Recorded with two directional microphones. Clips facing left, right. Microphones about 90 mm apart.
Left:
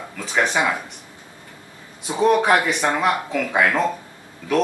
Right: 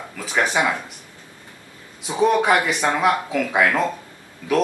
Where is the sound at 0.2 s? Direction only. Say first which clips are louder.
Even; 5° right (ahead or behind).